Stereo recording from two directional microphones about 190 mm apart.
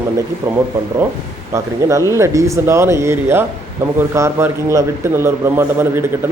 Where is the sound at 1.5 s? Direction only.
15° right (ahead or behind).